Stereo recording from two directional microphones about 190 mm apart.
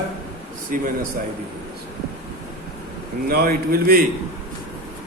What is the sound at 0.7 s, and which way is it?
Speech, 45° right (ahead or behind).